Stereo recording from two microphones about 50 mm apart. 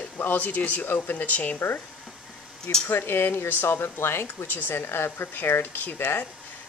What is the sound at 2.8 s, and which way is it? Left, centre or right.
Speech, left.